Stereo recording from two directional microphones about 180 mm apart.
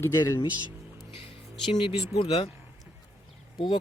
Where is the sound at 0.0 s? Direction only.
15° left (ahead or behind).